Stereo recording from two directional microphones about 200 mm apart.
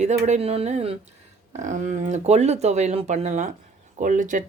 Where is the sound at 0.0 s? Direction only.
35° right (ahead or behind).